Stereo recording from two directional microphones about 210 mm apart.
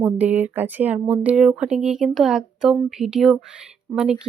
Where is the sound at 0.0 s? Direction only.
5° right (ahead or behind).